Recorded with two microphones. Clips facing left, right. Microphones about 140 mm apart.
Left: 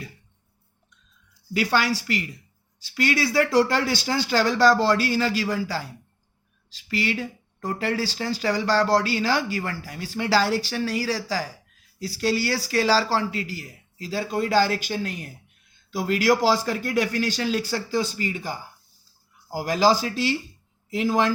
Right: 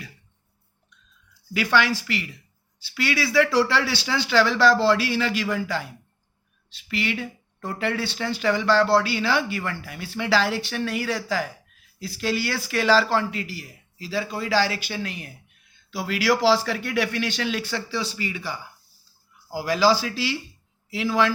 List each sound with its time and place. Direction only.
1.5 s speech: 40° left (ahead or behind)
6.9 s speech: 40° left (ahead or behind)